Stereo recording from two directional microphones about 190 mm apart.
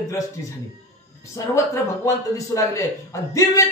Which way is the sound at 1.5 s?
15° left (ahead or behind).